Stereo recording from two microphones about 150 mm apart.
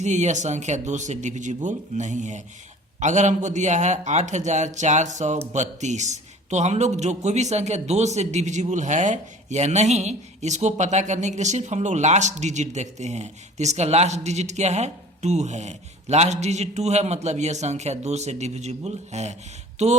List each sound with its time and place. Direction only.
0.0 s a man's voice: 50° right (ahead or behind)